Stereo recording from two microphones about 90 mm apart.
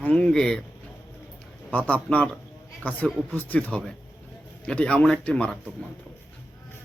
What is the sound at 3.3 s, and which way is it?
Speech, 20° left (ahead or behind).